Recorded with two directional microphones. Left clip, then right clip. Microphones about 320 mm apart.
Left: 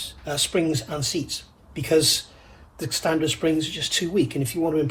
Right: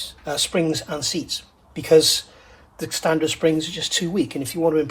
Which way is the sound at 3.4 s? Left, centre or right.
Centre.